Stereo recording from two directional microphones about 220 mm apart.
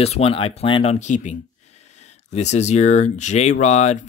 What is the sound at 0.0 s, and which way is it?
Speech, 25° left (ahead or behind).